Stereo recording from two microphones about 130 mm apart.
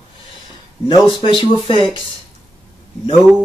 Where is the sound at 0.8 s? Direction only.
40° left (ahead or behind).